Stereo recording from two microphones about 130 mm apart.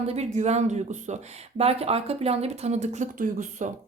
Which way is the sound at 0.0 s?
55° right (ahead or behind).